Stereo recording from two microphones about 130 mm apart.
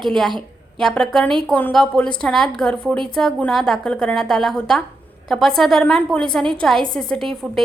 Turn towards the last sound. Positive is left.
turn(degrees=5)  # may be behind; listen again after turning